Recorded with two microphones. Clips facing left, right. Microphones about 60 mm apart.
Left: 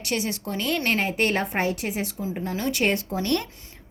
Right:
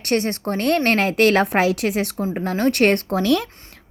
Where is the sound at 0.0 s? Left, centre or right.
Right.